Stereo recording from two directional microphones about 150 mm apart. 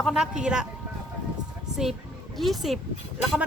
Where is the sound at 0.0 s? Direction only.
Centre (ahead or behind).